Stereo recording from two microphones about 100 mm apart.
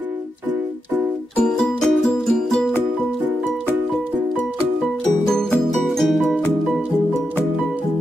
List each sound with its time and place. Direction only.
1.3 s music: 5° left (ahead or behind)
5.9 s music: centre (ahead or behind)